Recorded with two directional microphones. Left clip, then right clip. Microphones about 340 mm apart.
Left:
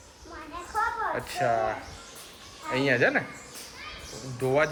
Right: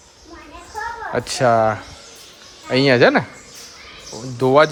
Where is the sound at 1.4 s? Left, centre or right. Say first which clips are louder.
Right 11 dB; right.